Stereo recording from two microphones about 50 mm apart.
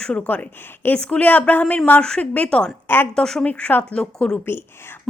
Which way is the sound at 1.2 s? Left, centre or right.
Left.